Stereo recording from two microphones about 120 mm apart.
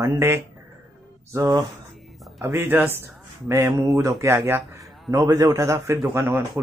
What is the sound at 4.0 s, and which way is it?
Speech, 25° right (ahead or behind).